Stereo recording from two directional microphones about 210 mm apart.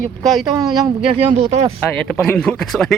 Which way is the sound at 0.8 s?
25° right (ahead or behind).